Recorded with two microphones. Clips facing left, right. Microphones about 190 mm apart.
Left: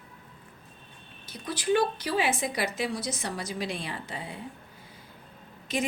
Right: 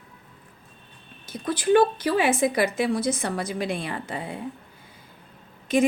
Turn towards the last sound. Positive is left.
turn(degrees=-50)  # may be behind; listen again after turning